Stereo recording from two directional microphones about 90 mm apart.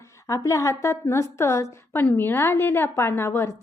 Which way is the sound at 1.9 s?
20° left (ahead or behind).